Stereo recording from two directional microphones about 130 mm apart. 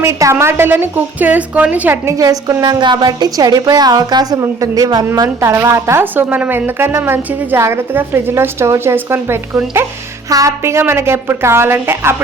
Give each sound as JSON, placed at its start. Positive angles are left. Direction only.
{"t": 0.0, "sound": "a woman's voice", "side_deg": -20}